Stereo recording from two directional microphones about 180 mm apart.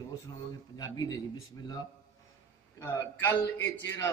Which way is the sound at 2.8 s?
15° left (ahead or behind).